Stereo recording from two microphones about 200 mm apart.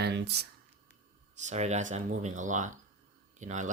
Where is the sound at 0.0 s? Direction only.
60° right (ahead or behind).